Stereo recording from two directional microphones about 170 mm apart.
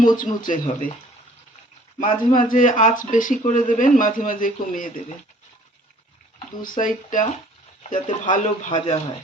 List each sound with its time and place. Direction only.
0.2 s speech: 50° left (ahead or behind)
2.0 s speech: 50° left (ahead or behind)
6.6 s speech: 50° left (ahead or behind)